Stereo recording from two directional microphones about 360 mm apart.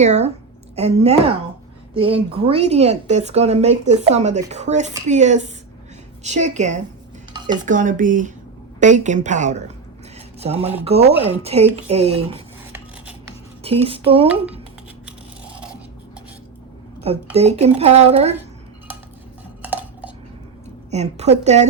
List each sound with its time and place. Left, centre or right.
0.0 s a woman's voice: centre
13.8 s a woman's voice: centre
17.3 s a woman's voice: centre
19.6 s dishes: centre
20.9 s speech: centre